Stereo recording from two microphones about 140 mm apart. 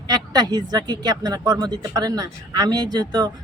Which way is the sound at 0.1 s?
30° right (ahead or behind).